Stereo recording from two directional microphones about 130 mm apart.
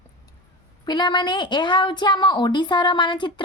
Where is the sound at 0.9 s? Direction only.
35° left (ahead or behind).